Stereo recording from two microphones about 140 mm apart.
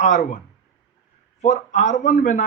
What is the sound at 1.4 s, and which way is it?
A man's voice, 55° left (ahead or behind).